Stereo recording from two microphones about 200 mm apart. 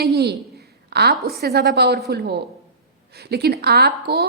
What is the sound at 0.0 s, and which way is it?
A woman's voice, 55° right (ahead or behind).